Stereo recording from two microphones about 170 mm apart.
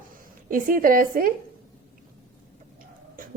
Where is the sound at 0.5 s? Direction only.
55° right (ahead or behind).